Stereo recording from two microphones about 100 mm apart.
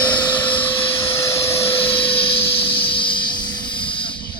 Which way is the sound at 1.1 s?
25° left (ahead or behind).